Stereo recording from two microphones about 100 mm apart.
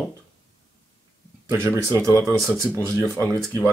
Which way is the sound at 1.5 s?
25° right (ahead or behind).